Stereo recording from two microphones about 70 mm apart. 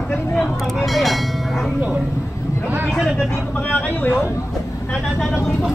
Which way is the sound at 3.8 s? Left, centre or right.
Left.